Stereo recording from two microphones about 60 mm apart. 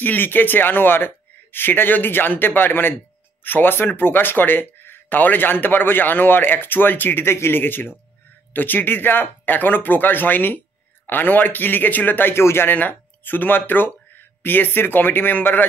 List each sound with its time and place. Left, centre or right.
0.0 s speech: left